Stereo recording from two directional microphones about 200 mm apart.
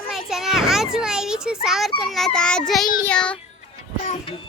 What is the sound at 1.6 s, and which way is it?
A child's voice, centre (ahead or behind).